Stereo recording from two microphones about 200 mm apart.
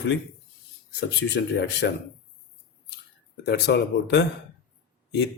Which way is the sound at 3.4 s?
55° left (ahead or behind).